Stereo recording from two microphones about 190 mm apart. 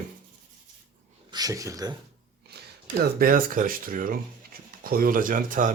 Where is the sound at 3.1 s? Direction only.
50° right (ahead or behind).